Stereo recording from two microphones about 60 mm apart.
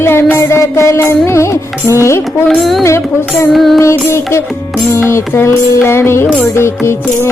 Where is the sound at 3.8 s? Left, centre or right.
Left.